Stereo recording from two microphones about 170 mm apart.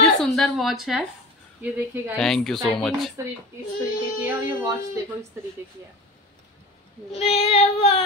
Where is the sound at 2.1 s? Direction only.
5° left (ahead or behind).